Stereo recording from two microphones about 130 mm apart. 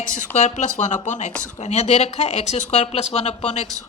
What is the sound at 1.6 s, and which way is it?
Speech, 60° left (ahead or behind).